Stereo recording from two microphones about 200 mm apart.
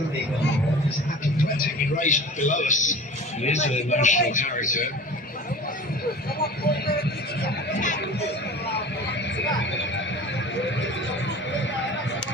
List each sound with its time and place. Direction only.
1.5 s a man's voice: 40° left (ahead or behind)
7.4 s a sound: 40° left (ahead or behind)
9.4 s music: 65° left (ahead or behind)